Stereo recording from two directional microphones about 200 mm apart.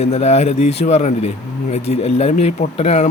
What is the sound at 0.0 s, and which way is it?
Speech, 35° left (ahead or behind).